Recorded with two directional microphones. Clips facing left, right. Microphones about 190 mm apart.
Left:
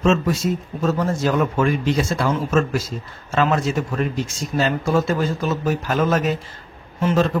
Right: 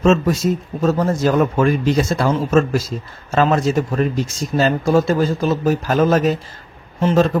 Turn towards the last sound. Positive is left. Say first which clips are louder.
# right 4 dB
turn(degrees=-40)  # may be behind; listen again after turning